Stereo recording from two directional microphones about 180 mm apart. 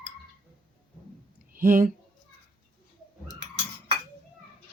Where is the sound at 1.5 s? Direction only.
50° right (ahead or behind).